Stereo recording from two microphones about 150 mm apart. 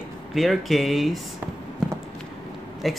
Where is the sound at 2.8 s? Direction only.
Centre (ahead or behind).